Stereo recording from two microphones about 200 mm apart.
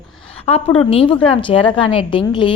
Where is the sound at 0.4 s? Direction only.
30° left (ahead or behind).